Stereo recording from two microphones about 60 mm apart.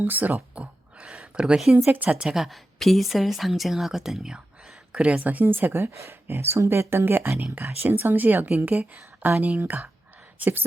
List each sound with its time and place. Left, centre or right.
0.0 s a sound: right
2.0 s a woman's voice: centre; by 5.9 s right
5.9 s speech: right
6.2 s speech: right